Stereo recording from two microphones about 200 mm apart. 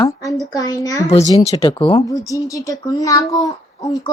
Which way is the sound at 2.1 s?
15° left (ahead or behind).